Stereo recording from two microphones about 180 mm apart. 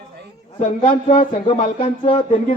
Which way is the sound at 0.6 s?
45° left (ahead or behind).